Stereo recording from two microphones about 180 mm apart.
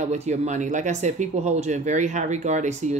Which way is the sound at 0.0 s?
40° right (ahead or behind).